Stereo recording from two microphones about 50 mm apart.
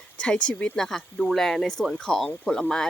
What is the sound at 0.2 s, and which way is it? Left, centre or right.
Speech, centre.